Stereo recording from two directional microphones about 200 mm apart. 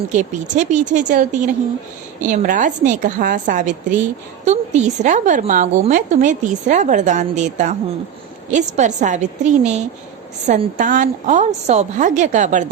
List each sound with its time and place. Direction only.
0.1 s a woman's voice: 40° right (ahead or behind)